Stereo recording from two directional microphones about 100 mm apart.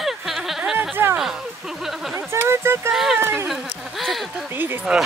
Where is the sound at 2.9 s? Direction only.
5° right (ahead or behind).